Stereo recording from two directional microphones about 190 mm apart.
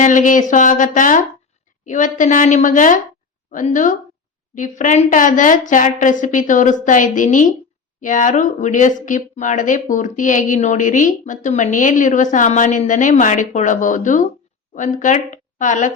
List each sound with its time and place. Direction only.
0.0 s a woman's voice: 40° left (ahead or behind)